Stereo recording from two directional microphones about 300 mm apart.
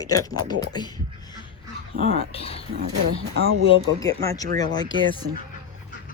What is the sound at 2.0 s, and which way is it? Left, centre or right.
Speech, right.